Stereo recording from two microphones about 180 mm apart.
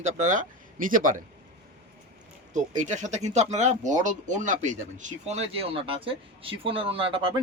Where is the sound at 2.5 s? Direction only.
40° right (ahead or behind).